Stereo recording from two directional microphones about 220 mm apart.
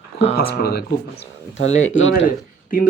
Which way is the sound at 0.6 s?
45° left (ahead or behind).